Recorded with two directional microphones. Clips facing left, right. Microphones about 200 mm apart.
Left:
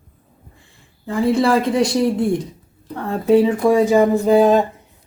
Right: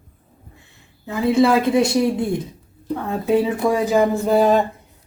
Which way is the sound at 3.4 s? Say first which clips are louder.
Left 5 dB; 5° right (ahead or behind).